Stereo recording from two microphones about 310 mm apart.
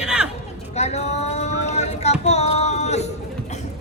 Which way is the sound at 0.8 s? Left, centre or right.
Left.